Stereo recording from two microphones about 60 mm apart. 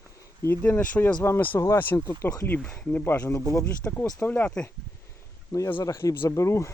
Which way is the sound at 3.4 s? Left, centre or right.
Left.